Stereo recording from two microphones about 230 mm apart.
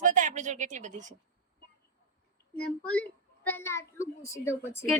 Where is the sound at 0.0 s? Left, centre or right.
Right.